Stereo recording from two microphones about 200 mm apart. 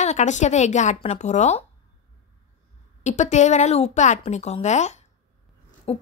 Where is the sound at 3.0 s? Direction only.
35° left (ahead or behind).